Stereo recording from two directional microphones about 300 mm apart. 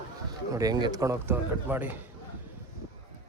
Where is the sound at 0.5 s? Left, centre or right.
Centre.